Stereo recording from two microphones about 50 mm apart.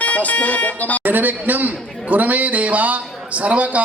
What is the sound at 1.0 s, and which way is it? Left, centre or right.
A man's voice, right.